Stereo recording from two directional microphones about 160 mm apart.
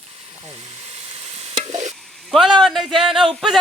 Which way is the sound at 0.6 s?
40° right (ahead or behind).